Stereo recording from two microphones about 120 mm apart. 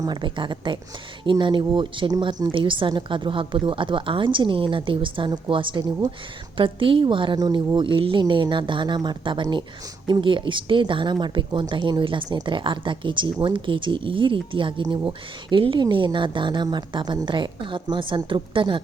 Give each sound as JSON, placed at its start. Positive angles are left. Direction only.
{"t": 0.0, "sound": "a woman's voice", "side_deg": -40}